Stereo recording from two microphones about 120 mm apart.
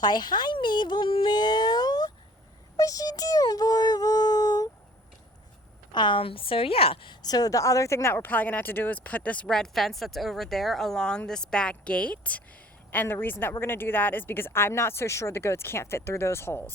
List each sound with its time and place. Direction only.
0.0 s a woman's voice: 35° left (ahead or behind)
2.7 s a sound: 30° left (ahead or behind)
5.9 s a woman's voice: 40° left (ahead or behind); by 16.7 s 20° left (ahead or behind)